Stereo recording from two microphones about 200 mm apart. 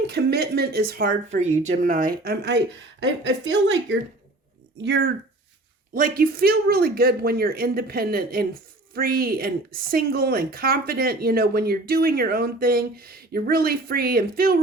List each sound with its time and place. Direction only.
0.1 s a woman's voice: 55° right (ahead or behind)
1.4 s a woman's voice: 35° right (ahead or behind); by 5.1 s 55° right (ahead or behind)
5.9 s a woman's voice: 45° right (ahead or behind)